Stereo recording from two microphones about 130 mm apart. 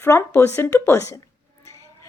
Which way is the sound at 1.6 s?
20° left (ahead or behind).